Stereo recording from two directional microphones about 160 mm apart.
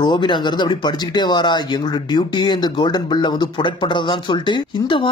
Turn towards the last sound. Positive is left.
turn(degrees=30)  # may be behind; listen again after turning